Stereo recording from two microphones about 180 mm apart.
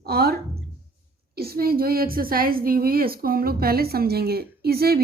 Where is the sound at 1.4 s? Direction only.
55° right (ahead or behind).